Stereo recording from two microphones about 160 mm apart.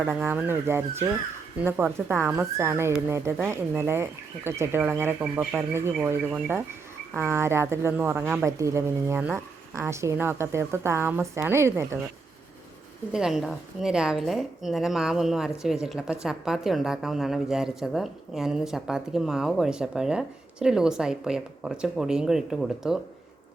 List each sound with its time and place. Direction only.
0.0 s speech: 10° right (ahead or behind)
8.2 s a woman's voice: 5° left (ahead or behind)
8.4 s speech: 20° right (ahead or behind)
13.1 s a woman's voice: 5° right (ahead or behind)